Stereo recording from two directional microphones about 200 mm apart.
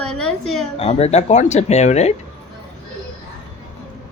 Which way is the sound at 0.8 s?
30° left (ahead or behind).